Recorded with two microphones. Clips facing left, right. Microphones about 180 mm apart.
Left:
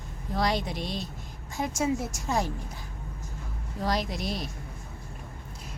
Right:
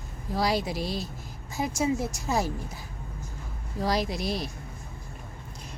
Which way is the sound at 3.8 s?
Centre (ahead or behind).